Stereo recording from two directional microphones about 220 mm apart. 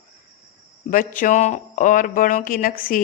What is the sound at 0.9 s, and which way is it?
Speech, 40° left (ahead or behind).